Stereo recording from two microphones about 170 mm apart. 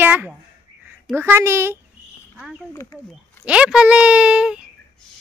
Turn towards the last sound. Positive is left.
turn(degrees=-5)  # may be behind; listen again after turning